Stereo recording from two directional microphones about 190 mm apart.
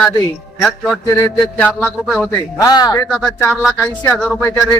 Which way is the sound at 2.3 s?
20° left (ahead or behind).